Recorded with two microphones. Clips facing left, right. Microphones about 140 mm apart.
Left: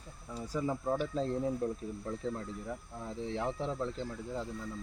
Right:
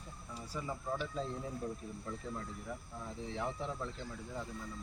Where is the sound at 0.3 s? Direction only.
40° left (ahead or behind).